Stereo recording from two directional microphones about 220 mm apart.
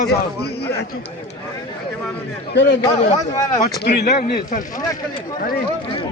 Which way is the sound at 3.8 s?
45° left (ahead or behind).